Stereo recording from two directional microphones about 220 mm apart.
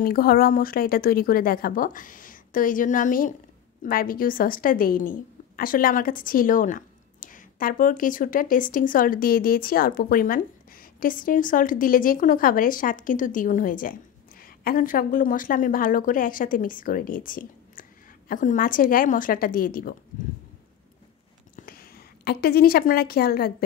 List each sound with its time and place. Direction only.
0.0 s a woman's voice: 40° left (ahead or behind)
21.5 s a woman's voice: 40° left (ahead or behind)